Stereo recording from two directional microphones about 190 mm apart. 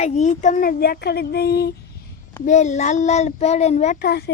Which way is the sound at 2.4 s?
40° left (ahead or behind).